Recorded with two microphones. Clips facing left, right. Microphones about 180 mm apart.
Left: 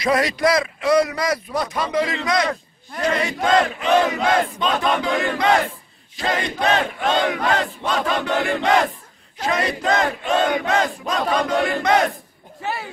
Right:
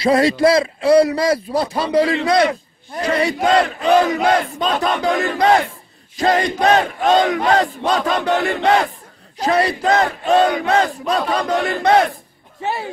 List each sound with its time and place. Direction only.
0.0 s battle cry: 30° right (ahead or behind)